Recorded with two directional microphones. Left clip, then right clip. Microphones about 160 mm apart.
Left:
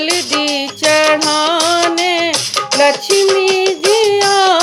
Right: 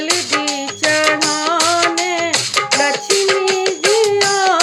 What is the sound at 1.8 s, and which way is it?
Music, 25° right (ahead or behind).